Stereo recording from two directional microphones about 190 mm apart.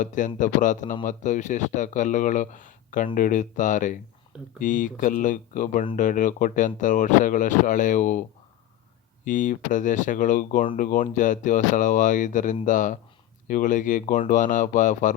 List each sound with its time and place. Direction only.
0.0 s speech: 40° left (ahead or behind)
9.2 s speech: 45° left (ahead or behind)